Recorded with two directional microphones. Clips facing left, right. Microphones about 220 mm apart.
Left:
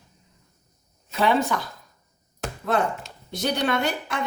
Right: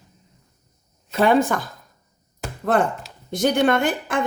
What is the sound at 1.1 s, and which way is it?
Speech, 50° right (ahead or behind).